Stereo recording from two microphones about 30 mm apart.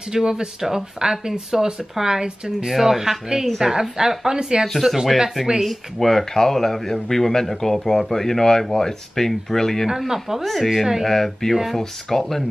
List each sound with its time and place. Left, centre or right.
0.1 s speech: right
2.7 s speech: centre
3.6 s speech: right
4.8 s speech: centre
5.7 s a man's voice: centre
9.8 s speech: centre
10.4 s speech: centre
10.7 s speech: centre
11.1 s a man's voice: centre